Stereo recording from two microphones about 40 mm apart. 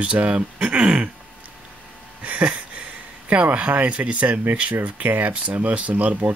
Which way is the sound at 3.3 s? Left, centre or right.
Right.